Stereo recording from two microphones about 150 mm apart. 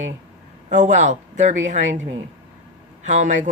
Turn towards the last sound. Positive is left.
turn(degrees=-55)  # may be behind; listen again after turning